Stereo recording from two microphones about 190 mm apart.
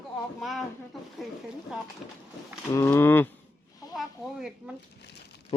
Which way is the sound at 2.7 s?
15° left (ahead or behind).